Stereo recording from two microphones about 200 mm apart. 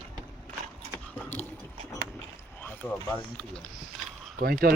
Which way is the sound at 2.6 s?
10° left (ahead or behind).